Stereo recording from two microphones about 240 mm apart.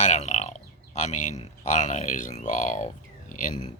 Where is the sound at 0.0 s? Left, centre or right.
Left.